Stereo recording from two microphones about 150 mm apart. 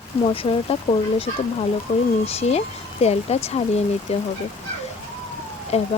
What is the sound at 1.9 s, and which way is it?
Speech, 50° left (ahead or behind).